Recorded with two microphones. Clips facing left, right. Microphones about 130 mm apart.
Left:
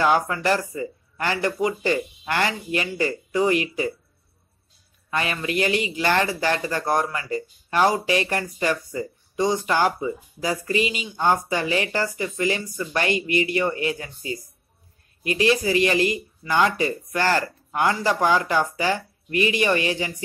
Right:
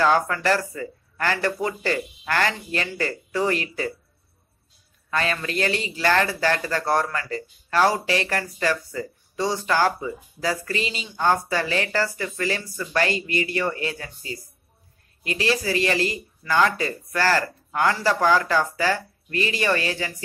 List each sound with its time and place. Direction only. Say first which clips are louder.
0.0 s a man's voice: even; 15° left (ahead or behind)
5.1 s a man's voice: even; 15° left (ahead or behind)
15.5 s speech: even; 20° left (ahead or behind)